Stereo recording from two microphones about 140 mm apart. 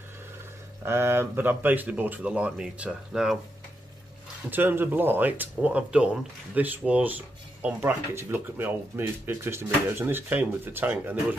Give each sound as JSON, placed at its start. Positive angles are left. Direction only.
{"t": 0.8, "sound": "speech", "side_deg": -15}
{"t": 4.5, "sound": "speech", "side_deg": -15}